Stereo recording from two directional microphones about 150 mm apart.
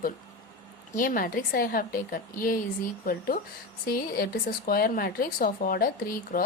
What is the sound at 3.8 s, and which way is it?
Speech, 80° left.